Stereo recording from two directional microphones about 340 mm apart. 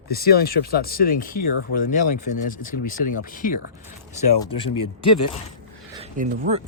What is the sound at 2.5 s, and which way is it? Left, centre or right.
Speech, left.